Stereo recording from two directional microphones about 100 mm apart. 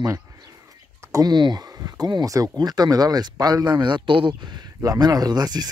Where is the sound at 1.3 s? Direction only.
45° right (ahead or behind).